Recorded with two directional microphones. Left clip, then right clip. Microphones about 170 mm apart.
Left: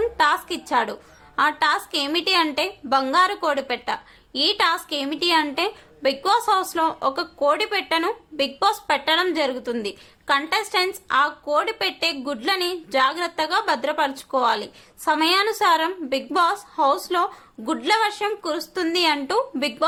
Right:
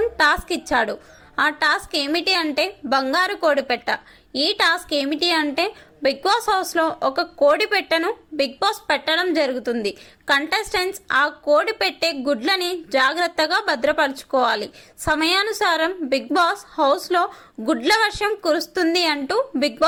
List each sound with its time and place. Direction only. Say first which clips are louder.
0.2 s a woman's voice: right 2 dB; 20° right (ahead or behind)